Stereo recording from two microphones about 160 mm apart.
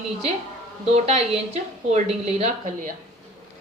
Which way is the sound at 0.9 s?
40° right (ahead or behind).